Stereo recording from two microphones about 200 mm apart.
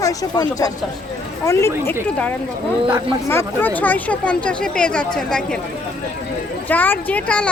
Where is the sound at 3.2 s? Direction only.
10° left (ahead or behind).